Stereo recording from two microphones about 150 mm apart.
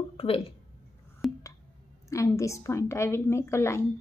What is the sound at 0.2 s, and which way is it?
Speech, 40° left (ahead or behind).